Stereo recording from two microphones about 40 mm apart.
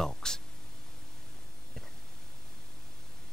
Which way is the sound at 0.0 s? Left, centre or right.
Centre.